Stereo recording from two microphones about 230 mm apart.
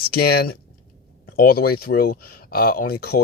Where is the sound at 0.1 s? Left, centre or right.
Left.